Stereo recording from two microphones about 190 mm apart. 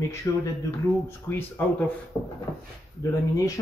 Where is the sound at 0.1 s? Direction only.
15° left (ahead or behind).